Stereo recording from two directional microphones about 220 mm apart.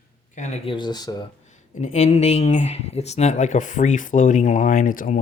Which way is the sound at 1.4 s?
35° left (ahead or behind).